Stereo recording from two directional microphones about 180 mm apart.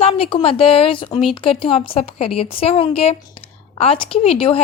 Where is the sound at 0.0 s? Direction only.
35° left (ahead or behind).